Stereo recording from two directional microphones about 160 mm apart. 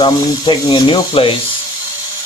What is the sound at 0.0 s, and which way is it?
Speech, 30° left (ahead or behind).